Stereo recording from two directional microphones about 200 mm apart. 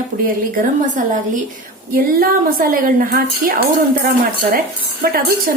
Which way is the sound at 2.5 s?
45° right (ahead or behind).